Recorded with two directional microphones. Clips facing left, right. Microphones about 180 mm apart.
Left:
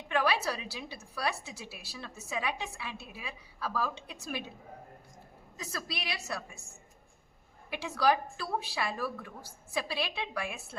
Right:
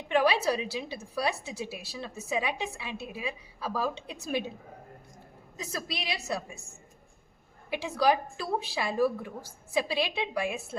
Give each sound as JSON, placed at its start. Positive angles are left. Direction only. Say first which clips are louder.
{"t": 0.1, "sound": "a woman's voice", "louder": "right 5 dB", "side_deg": -20}
{"t": 5.5, "sound": "a woman's voice", "louder": "right 3 dB", "side_deg": -20}
{"t": 7.7, "sound": "a woman's voice", "louder": "right 3 dB", "side_deg": -20}